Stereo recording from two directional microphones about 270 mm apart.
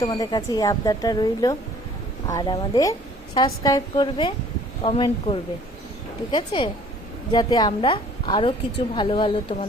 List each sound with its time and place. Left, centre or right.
0.0 s a woman's voice: centre